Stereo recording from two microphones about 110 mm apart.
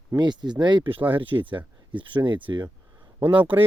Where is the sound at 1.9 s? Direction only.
45° right (ahead or behind).